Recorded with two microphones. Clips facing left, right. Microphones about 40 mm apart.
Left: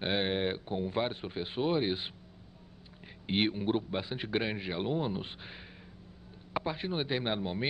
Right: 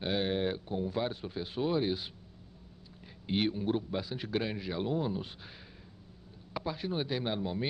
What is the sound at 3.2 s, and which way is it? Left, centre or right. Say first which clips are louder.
A man's voice: left 1 dB; left.